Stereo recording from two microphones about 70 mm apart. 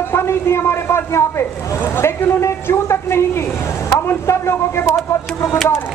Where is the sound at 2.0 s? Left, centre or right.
Left.